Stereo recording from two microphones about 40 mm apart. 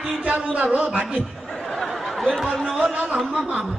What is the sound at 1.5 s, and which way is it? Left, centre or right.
Laughter, centre.